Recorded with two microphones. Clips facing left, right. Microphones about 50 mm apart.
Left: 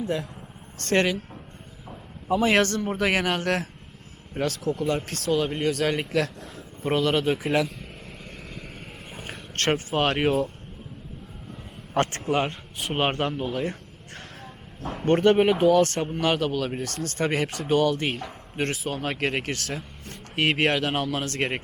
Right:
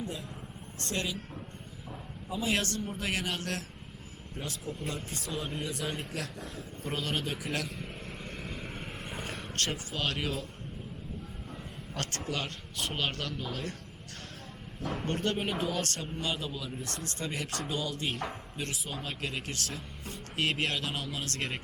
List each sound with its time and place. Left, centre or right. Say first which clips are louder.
0.0 s a man's voice: left 10 dB; left
2.3 s a man's voice: left 11 dB; left
4.4 s speech: left 13 dB; left
6.1 s a man's voice: left 12 dB; left
7.8 s vehicle: even; centre
9.6 s a man's voice: left 11 dB; left
12.0 s speech: left 12 dB; left
14.8 s speech: left 2 dB; centre
15.0 s a man's voice: left 15 dB; left
16.0 s speech: left 11 dB; left
16.8 s a man's voice: left 10 dB; left
21.2 s speech: left 8 dB; left